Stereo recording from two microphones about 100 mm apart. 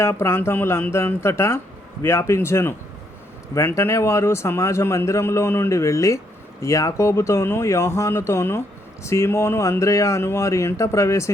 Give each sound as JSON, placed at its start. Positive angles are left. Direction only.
{"t": 0.0, "sound": "speech", "side_deg": 25}